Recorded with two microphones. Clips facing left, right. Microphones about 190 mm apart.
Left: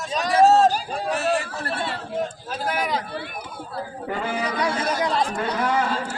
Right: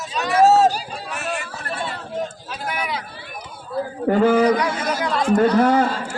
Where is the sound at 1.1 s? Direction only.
35° left (ahead or behind).